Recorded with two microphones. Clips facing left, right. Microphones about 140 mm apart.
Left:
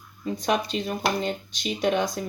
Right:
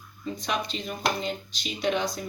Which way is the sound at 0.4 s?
45° left (ahead or behind).